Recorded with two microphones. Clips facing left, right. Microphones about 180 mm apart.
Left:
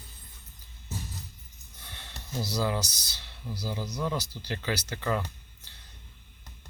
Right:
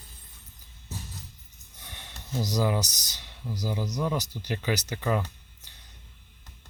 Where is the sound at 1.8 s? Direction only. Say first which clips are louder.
Right 1 dB; 15° right (ahead or behind).